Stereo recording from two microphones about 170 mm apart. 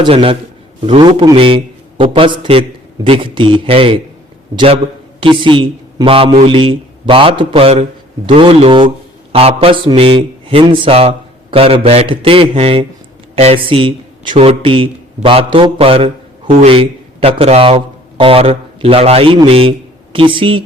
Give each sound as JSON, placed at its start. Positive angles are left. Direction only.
{"t": 0.0, "sound": "a man's voice", "side_deg": -35}